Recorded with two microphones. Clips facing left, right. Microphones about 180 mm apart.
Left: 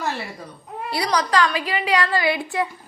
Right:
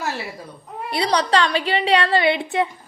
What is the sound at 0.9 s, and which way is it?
A woman's voice, 25° right (ahead or behind).